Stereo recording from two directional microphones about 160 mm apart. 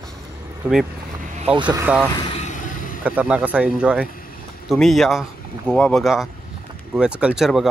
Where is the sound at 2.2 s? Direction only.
35° left (ahead or behind).